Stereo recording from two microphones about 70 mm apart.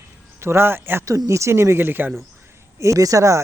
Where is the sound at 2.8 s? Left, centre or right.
Right.